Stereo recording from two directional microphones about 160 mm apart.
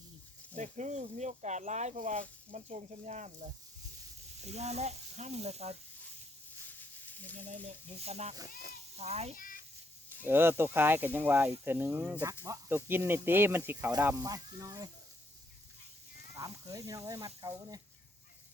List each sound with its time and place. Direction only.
0.5 s speech: 50° right (ahead or behind)
4.4 s speech: 45° right (ahead or behind)
6.7 s snake: 10° left (ahead or behind)
7.9 s speech: 40° right (ahead or behind)
9.3 s a child's voice: 60° left (ahead or behind)
10.2 s speech: 15° right (ahead or behind)
16.3 s speech: 20° right (ahead or behind)